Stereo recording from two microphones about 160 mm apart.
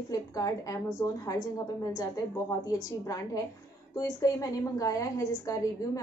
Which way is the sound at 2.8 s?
20° left (ahead or behind).